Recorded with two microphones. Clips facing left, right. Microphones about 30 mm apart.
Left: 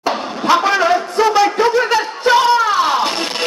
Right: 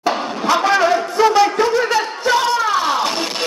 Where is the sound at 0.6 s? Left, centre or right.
Centre.